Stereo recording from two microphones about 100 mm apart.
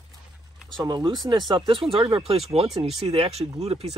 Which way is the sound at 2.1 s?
85° right.